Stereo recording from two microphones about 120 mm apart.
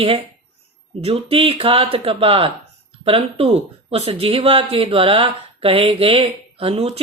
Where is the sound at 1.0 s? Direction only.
55° right (ahead or behind).